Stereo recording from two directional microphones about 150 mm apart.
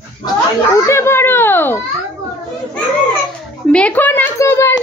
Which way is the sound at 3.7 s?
10° left (ahead or behind).